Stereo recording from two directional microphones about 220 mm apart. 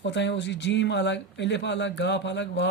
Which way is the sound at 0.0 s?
55° left (ahead or behind).